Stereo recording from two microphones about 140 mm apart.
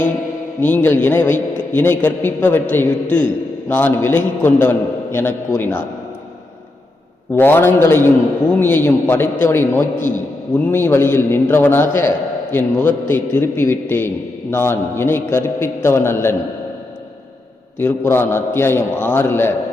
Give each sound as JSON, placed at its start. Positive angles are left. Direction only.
{"t": 0.6, "sound": "a man's voice", "side_deg": 15}
{"t": 7.3, "sound": "a man's voice", "side_deg": 15}
{"t": 17.7, "sound": "a man's voice", "side_deg": 15}